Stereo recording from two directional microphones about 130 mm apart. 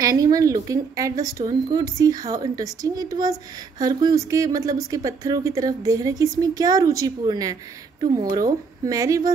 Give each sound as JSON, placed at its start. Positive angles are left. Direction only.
{"t": 0.0, "sound": "speech", "side_deg": -25}